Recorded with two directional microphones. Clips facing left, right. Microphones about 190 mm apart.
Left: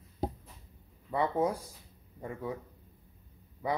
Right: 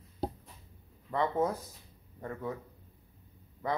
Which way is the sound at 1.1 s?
10° left (ahead or behind).